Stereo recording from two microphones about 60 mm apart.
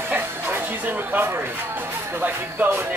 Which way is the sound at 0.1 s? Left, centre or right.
Right.